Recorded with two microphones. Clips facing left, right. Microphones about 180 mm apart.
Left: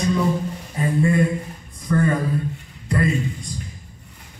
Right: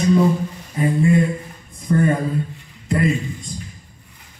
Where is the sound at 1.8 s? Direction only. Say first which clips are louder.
Right 2 dB; 20° right (ahead or behind).